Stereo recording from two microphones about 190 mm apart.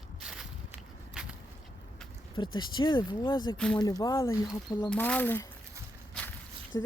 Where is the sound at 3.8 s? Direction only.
20° left (ahead or behind).